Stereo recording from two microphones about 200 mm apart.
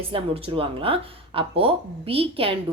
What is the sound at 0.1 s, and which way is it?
Speech, 25° right (ahead or behind).